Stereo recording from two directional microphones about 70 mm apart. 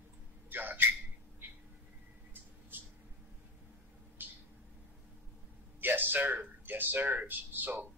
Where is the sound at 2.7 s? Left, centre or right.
Right.